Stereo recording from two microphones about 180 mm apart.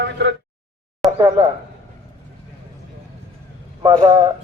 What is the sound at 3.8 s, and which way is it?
Speech, 20° right (ahead or behind).